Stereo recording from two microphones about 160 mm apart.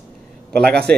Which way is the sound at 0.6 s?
90° right.